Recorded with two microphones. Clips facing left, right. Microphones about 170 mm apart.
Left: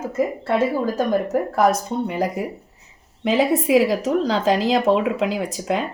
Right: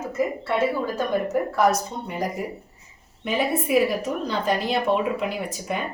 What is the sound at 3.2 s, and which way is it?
A woman's voice, 90° left.